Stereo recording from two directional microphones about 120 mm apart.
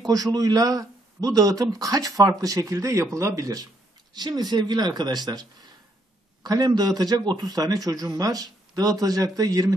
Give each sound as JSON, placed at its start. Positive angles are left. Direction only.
{"t": 0.0, "sound": "a man's voice", "side_deg": -30}